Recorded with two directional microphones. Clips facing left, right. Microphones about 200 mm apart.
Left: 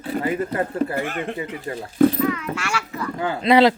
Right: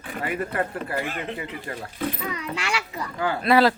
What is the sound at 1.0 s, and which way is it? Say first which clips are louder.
Speech: left 4 dB; 50° left (ahead or behind).